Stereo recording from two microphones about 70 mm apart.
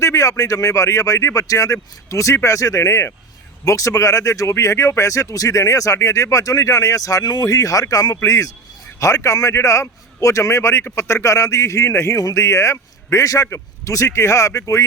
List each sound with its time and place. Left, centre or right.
0.0 s speech: left
7.4 s speech: left